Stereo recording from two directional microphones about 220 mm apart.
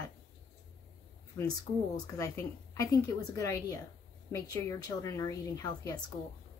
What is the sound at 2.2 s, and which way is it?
A woman's voice, 15° left (ahead or behind).